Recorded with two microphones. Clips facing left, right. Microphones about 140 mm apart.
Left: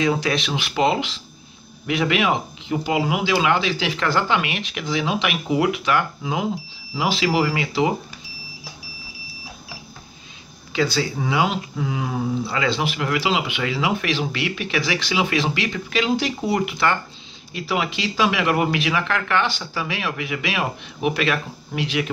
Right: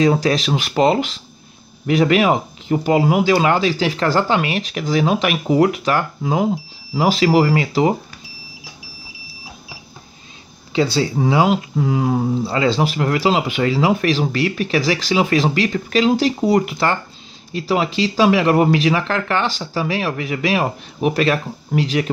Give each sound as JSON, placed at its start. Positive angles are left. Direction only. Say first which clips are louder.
{"t": 0.0, "sound": "speech", "louder": "right 5 dB", "side_deg": -40}
{"t": 10.7, "sound": "speech", "louder": "right 4 dB", "side_deg": -30}